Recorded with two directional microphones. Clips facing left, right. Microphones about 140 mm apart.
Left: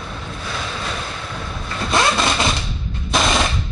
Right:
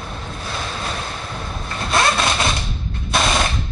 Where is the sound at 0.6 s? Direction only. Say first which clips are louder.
Even; 25° right (ahead or behind).